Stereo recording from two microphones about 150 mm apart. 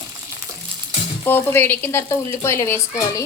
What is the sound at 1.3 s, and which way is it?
Speech, 15° left (ahead or behind).